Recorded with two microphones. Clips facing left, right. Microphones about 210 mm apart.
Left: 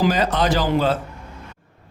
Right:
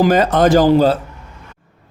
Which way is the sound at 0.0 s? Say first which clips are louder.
Right 7 dB; 50° right (ahead or behind).